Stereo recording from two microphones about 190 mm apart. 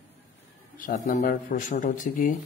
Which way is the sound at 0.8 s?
45° left (ahead or behind).